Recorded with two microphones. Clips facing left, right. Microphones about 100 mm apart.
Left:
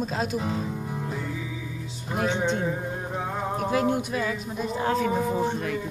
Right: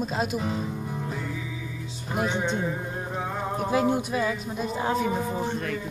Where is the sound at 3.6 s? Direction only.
20° right (ahead or behind); by 5.8 s 5° left (ahead or behind).